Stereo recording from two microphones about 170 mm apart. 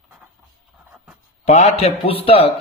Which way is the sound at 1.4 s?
45° left (ahead or behind).